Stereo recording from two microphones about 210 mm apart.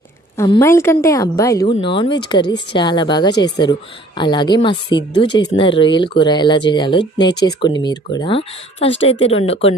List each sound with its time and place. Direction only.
0.3 s a woman's voice: 15° left (ahead or behind)